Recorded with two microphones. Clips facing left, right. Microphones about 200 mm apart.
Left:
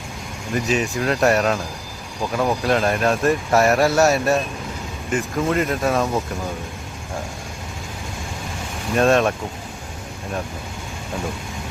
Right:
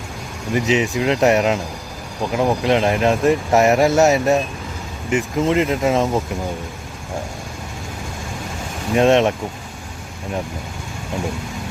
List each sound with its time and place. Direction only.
0.5 s speech: 20° right (ahead or behind)
9.0 s speech: 20° right (ahead or behind)